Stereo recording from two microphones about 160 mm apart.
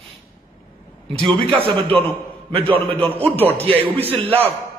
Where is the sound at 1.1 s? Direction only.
35° right (ahead or behind).